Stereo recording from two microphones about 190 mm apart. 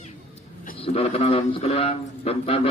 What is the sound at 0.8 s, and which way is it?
A man's voice, 30° left (ahead or behind).